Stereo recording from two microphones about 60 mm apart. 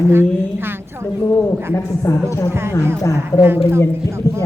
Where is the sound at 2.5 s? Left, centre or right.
Right.